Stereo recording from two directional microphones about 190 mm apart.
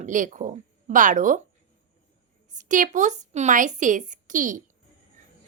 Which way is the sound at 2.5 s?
40° right (ahead or behind).